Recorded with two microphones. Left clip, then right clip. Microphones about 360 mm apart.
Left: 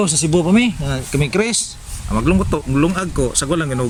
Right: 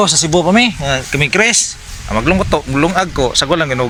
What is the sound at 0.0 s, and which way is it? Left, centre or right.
Speech, centre.